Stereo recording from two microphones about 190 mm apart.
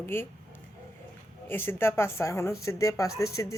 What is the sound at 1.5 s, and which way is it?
Speech, 10° left (ahead or behind).